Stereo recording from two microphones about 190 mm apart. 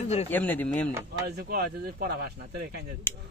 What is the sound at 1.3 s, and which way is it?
Speech, 55° right (ahead or behind).